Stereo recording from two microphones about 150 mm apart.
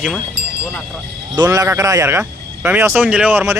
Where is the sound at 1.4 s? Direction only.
25° right (ahead or behind).